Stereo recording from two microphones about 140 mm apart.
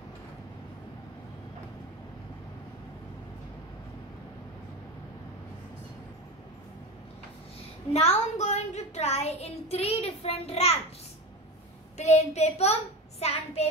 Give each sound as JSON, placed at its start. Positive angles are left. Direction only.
{"t": 7.9, "sound": "a child's voice", "side_deg": 50}
{"t": 12.0, "sound": "child singing", "side_deg": 55}